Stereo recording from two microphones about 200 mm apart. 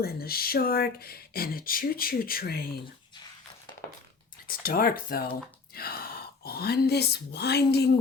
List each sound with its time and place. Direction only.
0.0 s speech: 50° left (ahead or behind)
4.4 s speech: 45° left (ahead or behind)